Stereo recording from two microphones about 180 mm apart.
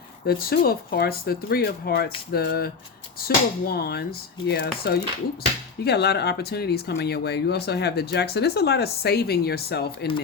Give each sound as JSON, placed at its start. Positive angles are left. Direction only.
{"t": 0.3, "sound": "speech", "side_deg": 55}